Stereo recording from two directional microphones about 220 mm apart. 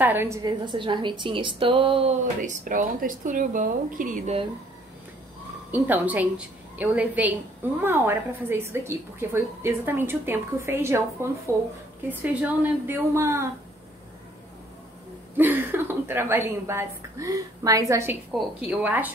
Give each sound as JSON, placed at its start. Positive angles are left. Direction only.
{"t": 0.0, "sound": "a woman's voice", "side_deg": -10}
{"t": 5.7, "sound": "a woman's voice", "side_deg": -10}
{"t": 15.3, "sound": "a woman's voice", "side_deg": -10}